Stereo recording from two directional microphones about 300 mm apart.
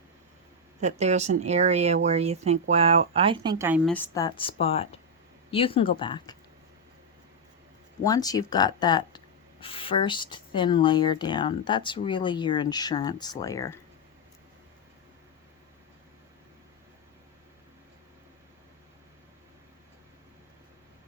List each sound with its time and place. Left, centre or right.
0.8 s speech: right
3.8 s speech: centre
8.0 s speech: centre